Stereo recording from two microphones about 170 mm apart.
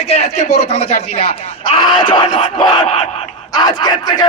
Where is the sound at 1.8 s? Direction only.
25° left (ahead or behind).